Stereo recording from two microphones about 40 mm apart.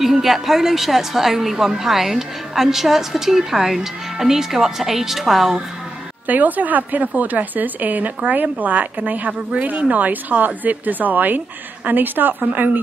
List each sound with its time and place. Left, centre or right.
0.0 s a woman's voice: centre
6.2 s a woman's voice: right